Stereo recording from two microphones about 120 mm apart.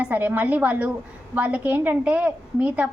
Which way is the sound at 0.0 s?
15° right (ahead or behind).